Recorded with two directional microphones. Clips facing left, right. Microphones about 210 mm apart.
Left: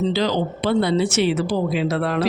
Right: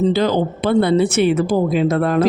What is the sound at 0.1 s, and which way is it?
Speech, 50° right (ahead or behind).